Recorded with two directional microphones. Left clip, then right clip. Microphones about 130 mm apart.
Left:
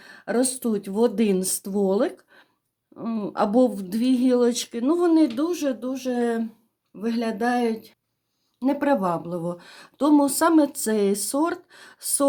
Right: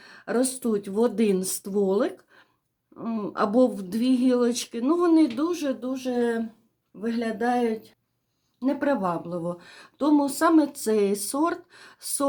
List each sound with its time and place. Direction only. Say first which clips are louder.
0.0 s speech: left 2 dB; 25° left (ahead or behind)